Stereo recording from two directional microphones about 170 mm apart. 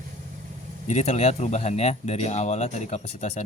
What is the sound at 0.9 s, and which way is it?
Speech, 40° left (ahead or behind).